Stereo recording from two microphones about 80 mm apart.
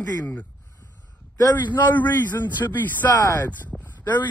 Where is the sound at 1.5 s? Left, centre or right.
Left.